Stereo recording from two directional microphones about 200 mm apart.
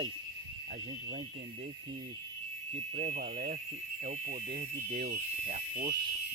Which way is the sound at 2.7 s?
35° right (ahead or behind).